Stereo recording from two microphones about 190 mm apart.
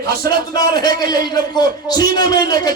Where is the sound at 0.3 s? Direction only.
20° left (ahead or behind).